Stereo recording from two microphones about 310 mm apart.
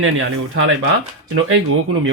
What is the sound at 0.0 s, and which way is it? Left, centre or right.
Speech, right.